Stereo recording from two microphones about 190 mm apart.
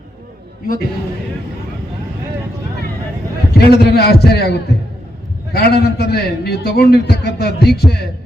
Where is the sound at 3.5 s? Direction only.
60° left (ahead or behind).